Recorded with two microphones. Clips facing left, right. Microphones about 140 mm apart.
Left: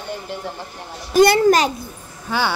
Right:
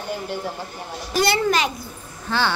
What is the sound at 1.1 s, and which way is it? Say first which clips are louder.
Speech: left 7 dB; 45° left (ahead or behind).